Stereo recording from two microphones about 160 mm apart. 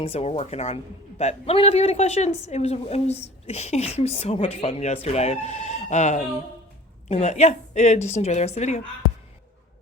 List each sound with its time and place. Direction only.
0.0 s a woman's voice: 40° left (ahead or behind)